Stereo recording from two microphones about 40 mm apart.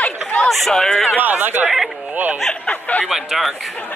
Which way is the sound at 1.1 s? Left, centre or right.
Right.